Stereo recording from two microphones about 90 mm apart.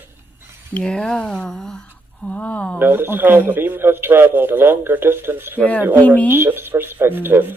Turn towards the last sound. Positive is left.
turn(degrees=-25)  # may be behind; listen again after turning